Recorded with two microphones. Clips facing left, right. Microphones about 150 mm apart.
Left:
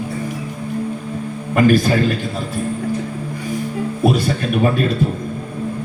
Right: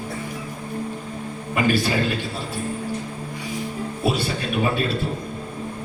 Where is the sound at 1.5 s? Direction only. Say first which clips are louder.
Left 7 dB; 45° left (ahead or behind).